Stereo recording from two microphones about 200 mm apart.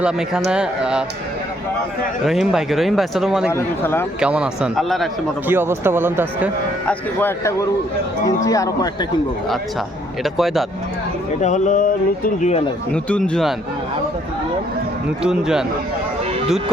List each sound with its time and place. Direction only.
0.0 s speech: 5° right (ahead or behind)
2.2 s speech: centre (ahead or behind)
3.5 s speech: 10° left (ahead or behind)
4.2 s speech: 5° right (ahead or behind)
5.5 s speech: 10° right (ahead or behind)
6.8 s speech: 10° left (ahead or behind)
10.2 s speech: centre (ahead or behind)
11.3 s speech: 35° left (ahead or behind)
12.9 s speech: 5° left (ahead or behind)
15.2 s speech: 5° right (ahead or behind)